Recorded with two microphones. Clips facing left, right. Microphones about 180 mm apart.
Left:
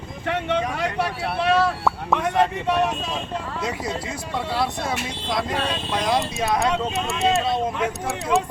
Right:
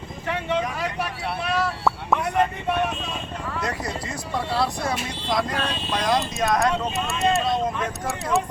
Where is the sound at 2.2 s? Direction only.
85° left.